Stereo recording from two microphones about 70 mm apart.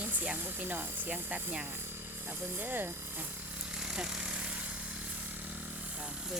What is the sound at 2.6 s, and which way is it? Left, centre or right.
Speech, right.